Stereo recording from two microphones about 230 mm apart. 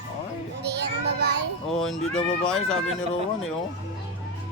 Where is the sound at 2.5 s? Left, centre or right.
Centre.